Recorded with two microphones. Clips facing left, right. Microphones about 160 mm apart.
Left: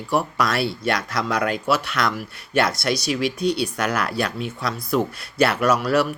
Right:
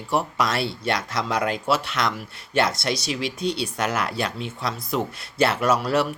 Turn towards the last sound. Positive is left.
turn(degrees=-25)  # may be behind; listen again after turning